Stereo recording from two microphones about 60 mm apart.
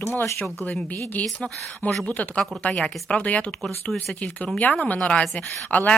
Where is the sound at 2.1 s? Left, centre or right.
Centre.